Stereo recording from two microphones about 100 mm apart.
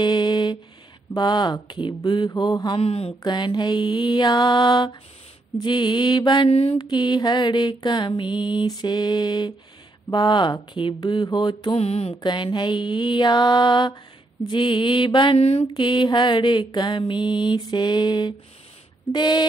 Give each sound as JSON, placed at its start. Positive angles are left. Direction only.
{"t": 0.0, "sound": "a sound", "side_deg": 50}
{"t": 1.1, "sound": "mantra", "side_deg": 50}
{"t": 2.8, "sound": "a woman's voice", "side_deg": 75}
{"t": 3.2, "sound": "mantra", "side_deg": 45}
{"t": 6.5, "sound": "mantra", "side_deg": 90}
{"t": 6.8, "sound": "mantra", "side_deg": 45}
{"t": 11.7, "sound": "mantra", "side_deg": 90}
{"t": 12.2, "sound": "mantra", "side_deg": 50}
{"t": 15.3, "sound": "mantra", "side_deg": 90}
{"t": 15.6, "sound": "mantra", "side_deg": 50}